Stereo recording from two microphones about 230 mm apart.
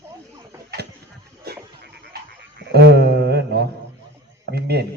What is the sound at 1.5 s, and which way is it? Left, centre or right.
Frog, right.